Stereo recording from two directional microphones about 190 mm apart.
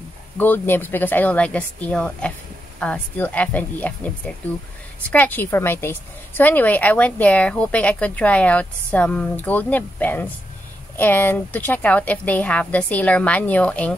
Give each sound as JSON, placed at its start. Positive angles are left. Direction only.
{"t": 0.4, "sound": "a woman's voice", "side_deg": 10}
{"t": 5.1, "sound": "a woman's voice", "side_deg": 10}